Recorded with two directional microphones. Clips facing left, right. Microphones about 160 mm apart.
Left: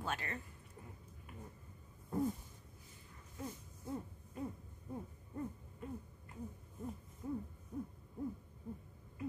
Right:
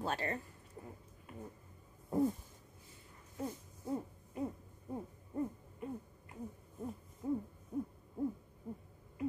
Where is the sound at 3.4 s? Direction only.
35° right (ahead or behind).